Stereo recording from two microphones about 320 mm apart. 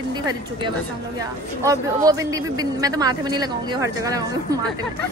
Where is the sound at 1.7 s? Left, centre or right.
Centre.